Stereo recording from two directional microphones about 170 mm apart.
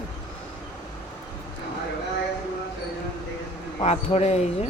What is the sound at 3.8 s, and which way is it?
Speech, 40° left (ahead or behind).